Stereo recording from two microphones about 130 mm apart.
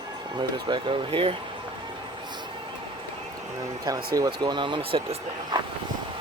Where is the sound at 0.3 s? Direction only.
40° right (ahead or behind).